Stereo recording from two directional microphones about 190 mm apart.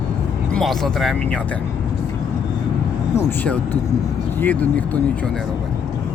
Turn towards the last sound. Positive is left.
turn(degrees=5)  # may be behind; listen again after turning